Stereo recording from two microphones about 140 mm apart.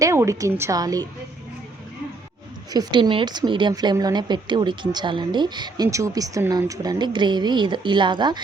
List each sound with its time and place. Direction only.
0.0 s a woman's voice: 20° right (ahead or behind)
2.7 s speech: 35° right (ahead or behind)